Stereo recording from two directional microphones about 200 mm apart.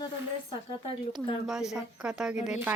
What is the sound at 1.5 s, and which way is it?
A woman's voice, centre (ahead or behind).